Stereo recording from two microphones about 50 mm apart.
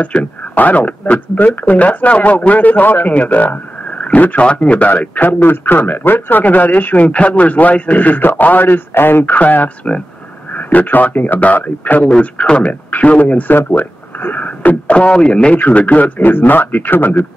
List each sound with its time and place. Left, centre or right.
0.0 s speech: left
12.2 s speech: left
15.5 s speech: left
16.2 s speech: left